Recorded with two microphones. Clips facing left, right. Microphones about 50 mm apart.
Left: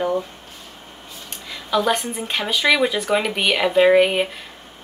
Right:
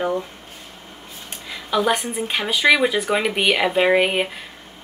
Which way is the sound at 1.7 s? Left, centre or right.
Centre.